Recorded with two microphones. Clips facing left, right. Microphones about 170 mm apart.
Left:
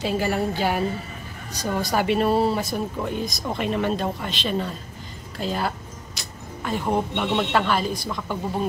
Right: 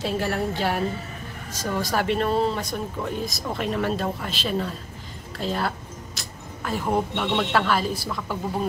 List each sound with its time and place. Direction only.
0.0 s speech: centre (ahead or behind)
6.1 s vehicle: centre (ahead or behind)
7.3 s speech: centre (ahead or behind)